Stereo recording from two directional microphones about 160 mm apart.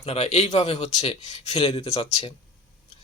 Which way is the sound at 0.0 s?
40° left (ahead or behind).